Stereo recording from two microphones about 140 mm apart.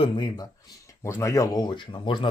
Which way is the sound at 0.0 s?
30° left (ahead or behind).